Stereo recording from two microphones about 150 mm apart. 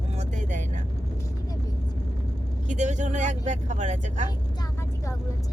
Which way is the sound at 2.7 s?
55° right (ahead or behind).